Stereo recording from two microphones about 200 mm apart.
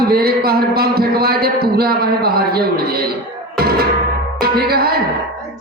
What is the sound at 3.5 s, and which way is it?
Music, 50° right (ahead or behind).